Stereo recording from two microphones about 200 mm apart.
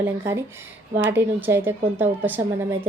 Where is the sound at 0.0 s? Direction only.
15° right (ahead or behind).